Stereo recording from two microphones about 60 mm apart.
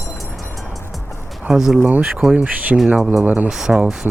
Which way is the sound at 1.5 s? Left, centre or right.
Centre.